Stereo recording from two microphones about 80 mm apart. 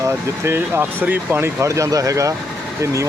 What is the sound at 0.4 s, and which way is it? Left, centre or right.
Speech, right.